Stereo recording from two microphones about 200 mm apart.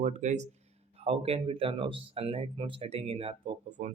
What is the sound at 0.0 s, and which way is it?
Speech, 35° right (ahead or behind).